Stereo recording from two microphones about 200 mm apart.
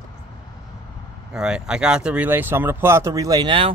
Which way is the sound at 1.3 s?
5° right (ahead or behind).